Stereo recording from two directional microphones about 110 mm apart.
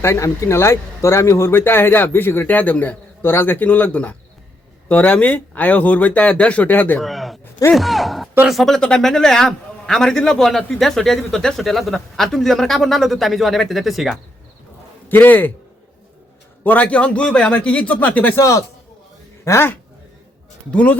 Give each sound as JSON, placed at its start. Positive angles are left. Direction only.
{"t": 0.0, "sound": "speech", "side_deg": 25}
{"t": 7.0, "sound": "a man's voice", "side_deg": 0}
{"t": 15.1, "sound": "speech", "side_deg": 15}
{"t": 16.6, "sound": "speech", "side_deg": 15}
{"t": 18.3, "sound": "speech", "side_deg": 30}
{"t": 20.7, "sound": "speech", "side_deg": 10}